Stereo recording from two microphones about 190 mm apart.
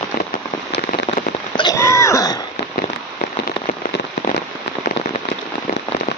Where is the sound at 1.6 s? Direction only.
15° left (ahead or behind).